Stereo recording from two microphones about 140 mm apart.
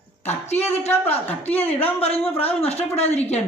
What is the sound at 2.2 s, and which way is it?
Speech, 15° left (ahead or behind).